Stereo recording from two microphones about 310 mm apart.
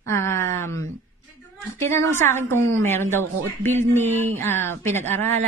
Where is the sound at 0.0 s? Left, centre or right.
Centre.